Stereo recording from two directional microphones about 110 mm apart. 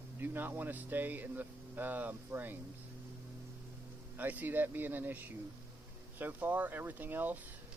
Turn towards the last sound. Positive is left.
turn(degrees=-15)  # may be behind; listen again after turning